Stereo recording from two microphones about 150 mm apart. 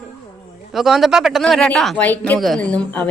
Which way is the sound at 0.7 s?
Centre (ahead or behind).